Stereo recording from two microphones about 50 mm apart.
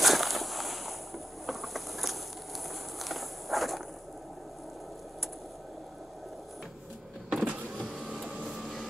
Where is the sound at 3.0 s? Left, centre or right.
Centre.